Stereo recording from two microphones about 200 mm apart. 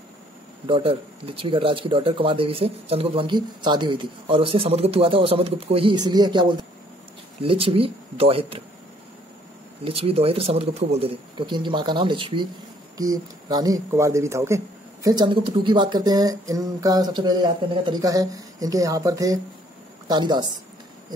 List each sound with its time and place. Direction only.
0.7 s speech: 25° right (ahead or behind)
9.8 s speech: 30° right (ahead or behind)